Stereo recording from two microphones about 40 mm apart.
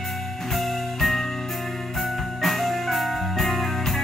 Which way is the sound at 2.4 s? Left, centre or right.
Centre.